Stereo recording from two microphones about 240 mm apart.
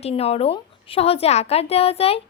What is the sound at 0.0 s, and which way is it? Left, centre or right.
A woman's voice, left.